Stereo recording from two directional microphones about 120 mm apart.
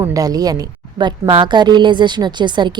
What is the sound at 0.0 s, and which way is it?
A woman's voice, 30° right (ahead or behind).